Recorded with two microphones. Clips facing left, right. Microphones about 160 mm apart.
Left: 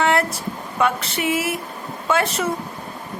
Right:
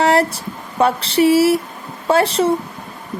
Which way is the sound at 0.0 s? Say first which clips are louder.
Right 4 dB; 35° right (ahead or behind).